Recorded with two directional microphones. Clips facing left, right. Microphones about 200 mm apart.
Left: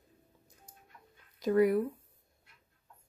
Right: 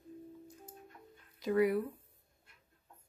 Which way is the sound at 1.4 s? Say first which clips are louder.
Left 4 dB; 45° left (ahead or behind).